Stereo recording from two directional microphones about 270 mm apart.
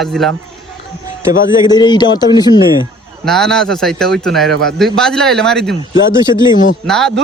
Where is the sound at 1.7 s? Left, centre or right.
Centre.